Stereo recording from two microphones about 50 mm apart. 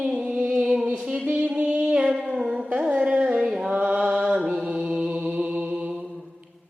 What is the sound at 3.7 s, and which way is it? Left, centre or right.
Mantra, right.